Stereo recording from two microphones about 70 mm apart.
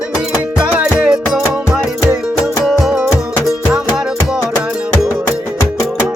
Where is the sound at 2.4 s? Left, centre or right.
Centre.